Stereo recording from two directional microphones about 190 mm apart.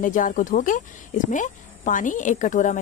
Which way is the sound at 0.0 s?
45° left (ahead or behind).